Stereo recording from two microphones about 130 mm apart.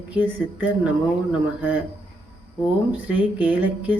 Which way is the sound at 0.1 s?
15° right (ahead or behind).